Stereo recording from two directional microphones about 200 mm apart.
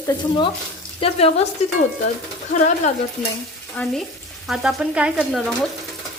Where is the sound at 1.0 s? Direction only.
30° left (ahead or behind).